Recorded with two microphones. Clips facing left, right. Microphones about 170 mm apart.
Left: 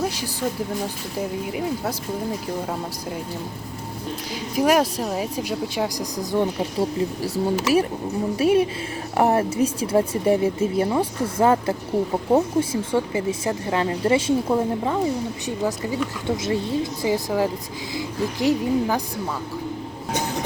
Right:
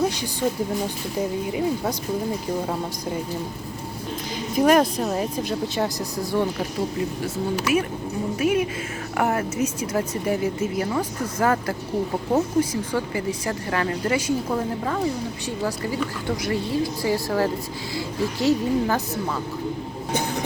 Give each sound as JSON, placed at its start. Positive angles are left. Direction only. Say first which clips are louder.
{"t": 1.5, "sound": "speech", "louder": "right 2 dB", "side_deg": 5}
{"t": 4.5, "sound": "speech", "louder": "right 1 dB", "side_deg": 10}
{"t": 7.3, "sound": "speech", "louder": "left 3 dB", "side_deg": 30}